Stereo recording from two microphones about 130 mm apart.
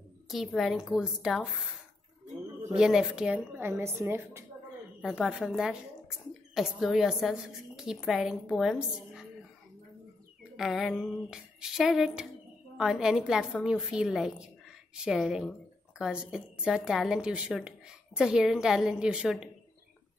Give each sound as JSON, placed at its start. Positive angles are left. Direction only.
{"t": 0.3, "sound": "a woman's voice", "side_deg": 0}
{"t": 5.3, "sound": "speech", "side_deg": -5}
{"t": 10.5, "sound": "speech", "side_deg": 0}